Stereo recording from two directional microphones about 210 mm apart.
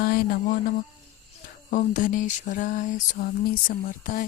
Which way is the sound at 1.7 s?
35° left (ahead or behind).